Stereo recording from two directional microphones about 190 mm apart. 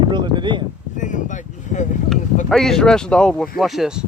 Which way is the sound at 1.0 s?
40° left (ahead or behind).